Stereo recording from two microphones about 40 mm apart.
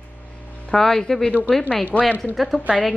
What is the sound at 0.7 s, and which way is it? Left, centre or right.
Speech, centre.